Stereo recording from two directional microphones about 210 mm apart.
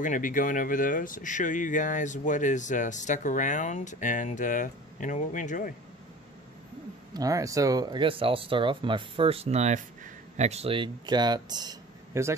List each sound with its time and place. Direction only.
0.0 s speech: 40° left (ahead or behind)
7.2 s speech: 15° right (ahead or behind)